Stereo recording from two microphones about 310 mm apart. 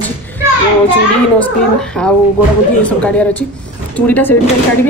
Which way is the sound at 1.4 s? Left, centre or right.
Centre.